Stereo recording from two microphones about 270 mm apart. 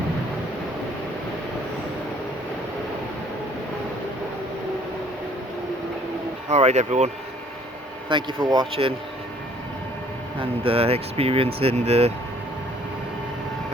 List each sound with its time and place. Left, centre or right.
6.5 s speech: right
8.1 s speech: centre
10.6 s speech: right